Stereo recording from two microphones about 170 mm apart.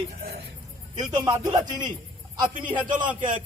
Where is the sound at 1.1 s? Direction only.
20° right (ahead or behind).